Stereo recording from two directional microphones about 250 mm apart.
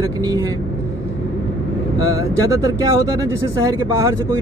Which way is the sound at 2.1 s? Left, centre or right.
Centre.